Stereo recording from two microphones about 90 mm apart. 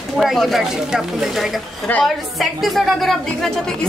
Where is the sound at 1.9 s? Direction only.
20° left (ahead or behind).